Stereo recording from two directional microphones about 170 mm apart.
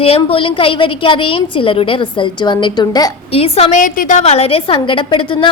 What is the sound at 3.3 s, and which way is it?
Speech, 35° left (ahead or behind).